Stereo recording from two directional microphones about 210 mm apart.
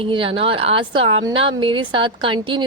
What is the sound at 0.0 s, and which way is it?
A woman's voice, 25° right (ahead or behind).